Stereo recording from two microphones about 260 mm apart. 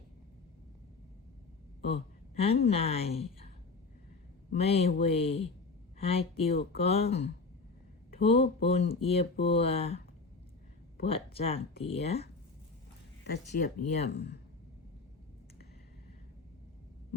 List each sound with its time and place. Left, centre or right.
1.8 s a woman's voice: left
4.5 s speech: left
11.0 s speech: left
13.2 s speech: left
14.1 s speech: left